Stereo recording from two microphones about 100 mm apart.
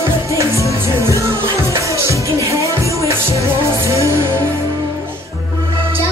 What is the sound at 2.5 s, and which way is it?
Music, 30° right (ahead or behind).